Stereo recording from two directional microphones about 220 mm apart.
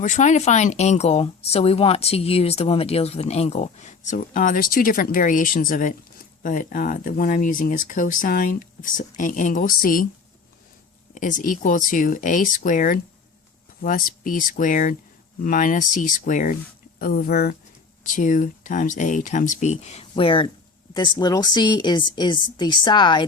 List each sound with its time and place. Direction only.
0.0 s speech: 35° left (ahead or behind)
11.1 s speech: 35° left (ahead or behind)